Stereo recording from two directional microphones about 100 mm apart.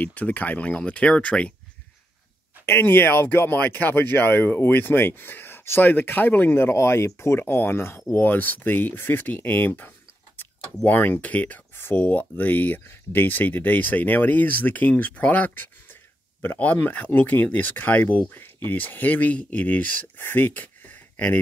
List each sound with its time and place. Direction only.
0.0 s speech: 15° left (ahead or behind)
2.6 s speech: 25° left (ahead or behind)